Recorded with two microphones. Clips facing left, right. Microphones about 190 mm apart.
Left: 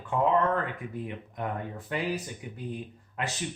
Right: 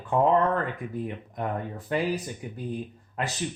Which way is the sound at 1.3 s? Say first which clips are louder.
Right 2 dB; 40° right (ahead or behind).